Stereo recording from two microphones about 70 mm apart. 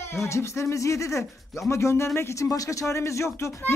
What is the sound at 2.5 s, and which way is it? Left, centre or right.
Speech, left.